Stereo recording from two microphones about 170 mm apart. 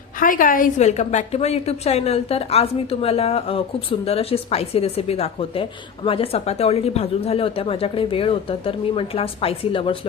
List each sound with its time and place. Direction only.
0.2 s a woman's voice: 55° left (ahead or behind); by 10.0 s 30° left (ahead or behind)